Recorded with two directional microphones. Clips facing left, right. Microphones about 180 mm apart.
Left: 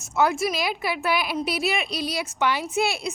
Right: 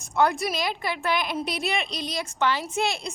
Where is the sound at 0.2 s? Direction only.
Centre (ahead or behind).